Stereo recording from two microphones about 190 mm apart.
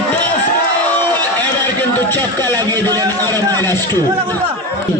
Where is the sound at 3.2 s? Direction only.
10° left (ahead or behind).